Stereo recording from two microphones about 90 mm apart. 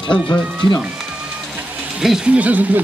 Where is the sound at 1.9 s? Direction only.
10° right (ahead or behind).